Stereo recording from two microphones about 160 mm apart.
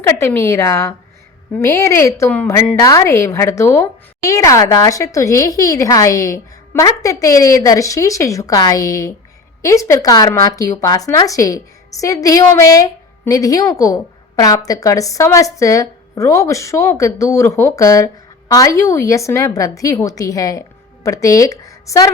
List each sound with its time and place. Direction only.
0.0 s a woman's voice: 15° left (ahead or behind)